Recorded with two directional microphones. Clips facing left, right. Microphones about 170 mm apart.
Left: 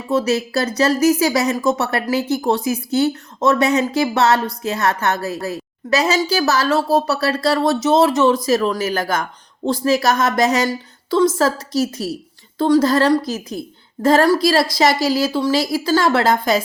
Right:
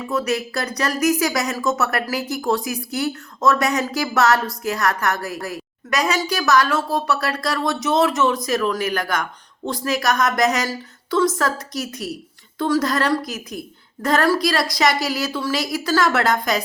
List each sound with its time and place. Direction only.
0.1 s a woman's voice: 25° left (ahead or behind)